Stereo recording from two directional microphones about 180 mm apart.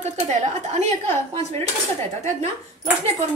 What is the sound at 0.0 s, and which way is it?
A woman's voice, 40° right (ahead or behind).